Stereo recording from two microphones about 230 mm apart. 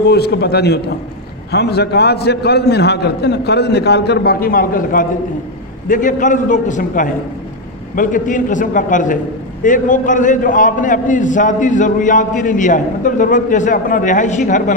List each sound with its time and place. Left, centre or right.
0.1 s a man's voice: left